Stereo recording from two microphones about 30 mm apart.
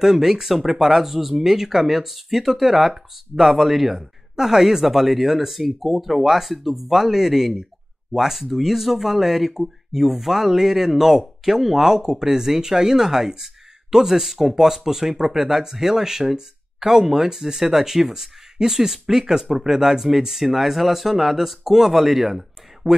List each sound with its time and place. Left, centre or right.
0.0 s speech: centre
22.8 s speech: right